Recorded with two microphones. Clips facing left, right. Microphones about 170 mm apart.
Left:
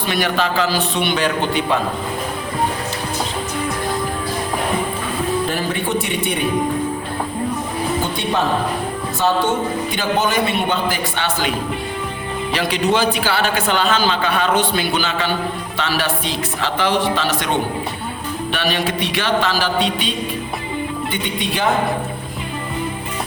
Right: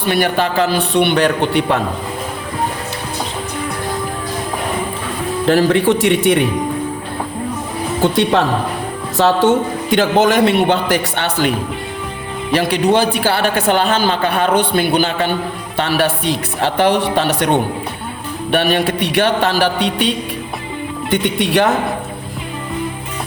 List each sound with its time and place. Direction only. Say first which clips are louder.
0.1 s a man's voice: right 4 dB; 55° right (ahead or behind)
5.5 s speech: right 9 dB; 80° right
8.0 s speech: right 6 dB; 85° right
9.9 s speech: right 9 dB; 90° right; by 11.5 s 65° right (ahead or behind)
12.5 s a man's voice: right 5 dB; 55° right (ahead or behind); by 21.7 s 75° right (ahead or behind)